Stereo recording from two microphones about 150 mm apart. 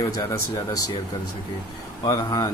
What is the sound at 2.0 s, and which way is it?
Speech, 25° left (ahead or behind).